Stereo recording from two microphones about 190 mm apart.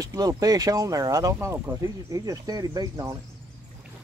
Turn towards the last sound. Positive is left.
turn(degrees=-20)  # may be behind; listen again after turning